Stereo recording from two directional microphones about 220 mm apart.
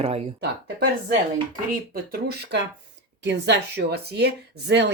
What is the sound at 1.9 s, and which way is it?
Speech, 45° right (ahead or behind).